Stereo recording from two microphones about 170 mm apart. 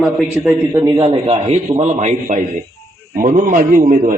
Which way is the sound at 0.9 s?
30° right (ahead or behind).